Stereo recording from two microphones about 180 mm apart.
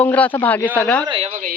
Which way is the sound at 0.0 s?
10° left (ahead or behind).